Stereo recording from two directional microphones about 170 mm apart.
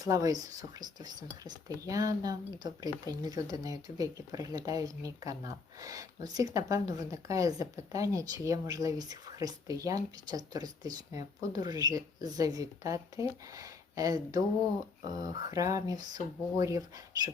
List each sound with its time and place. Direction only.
0.0 s speech: 20° right (ahead or behind)